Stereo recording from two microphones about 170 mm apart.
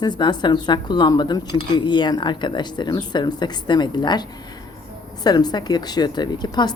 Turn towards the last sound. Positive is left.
turn(degrees=25)  # may be behind; listen again after turning